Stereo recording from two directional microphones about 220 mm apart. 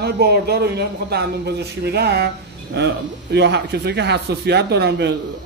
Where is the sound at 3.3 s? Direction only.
50° right (ahead or behind).